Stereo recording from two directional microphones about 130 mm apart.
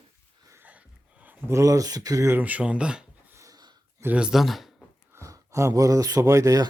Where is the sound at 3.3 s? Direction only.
30° right (ahead or behind).